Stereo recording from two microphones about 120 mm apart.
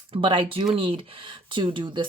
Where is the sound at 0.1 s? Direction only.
45° right (ahead or behind).